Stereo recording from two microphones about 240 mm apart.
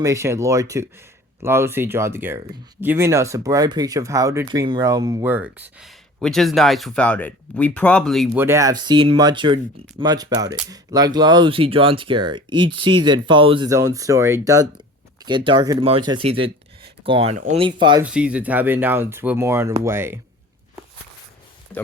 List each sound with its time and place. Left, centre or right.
0.0 s speech: centre
8.3 s speech: centre
18.0 s speech: centre